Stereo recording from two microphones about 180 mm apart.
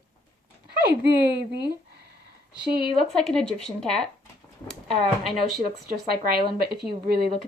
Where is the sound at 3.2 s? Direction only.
5° left (ahead or behind).